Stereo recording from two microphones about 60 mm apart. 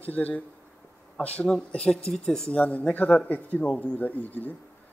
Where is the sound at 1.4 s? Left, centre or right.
Centre.